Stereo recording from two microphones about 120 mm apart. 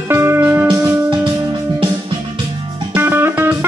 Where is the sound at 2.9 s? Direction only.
20° right (ahead or behind).